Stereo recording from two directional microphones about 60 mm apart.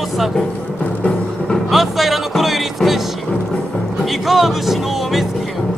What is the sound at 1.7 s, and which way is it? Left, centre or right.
Speech, centre.